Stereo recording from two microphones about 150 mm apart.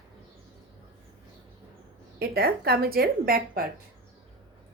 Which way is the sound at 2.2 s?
90° right.